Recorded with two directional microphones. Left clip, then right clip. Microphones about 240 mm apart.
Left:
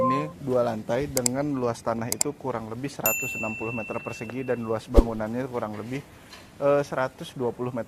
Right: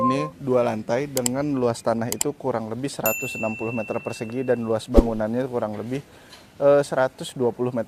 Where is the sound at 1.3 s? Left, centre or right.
Right.